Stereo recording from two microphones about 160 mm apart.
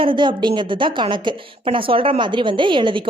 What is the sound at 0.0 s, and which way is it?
A woman's voice, 30° right (ahead or behind).